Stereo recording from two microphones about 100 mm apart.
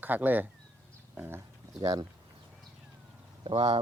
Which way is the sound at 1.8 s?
40° right (ahead or behind).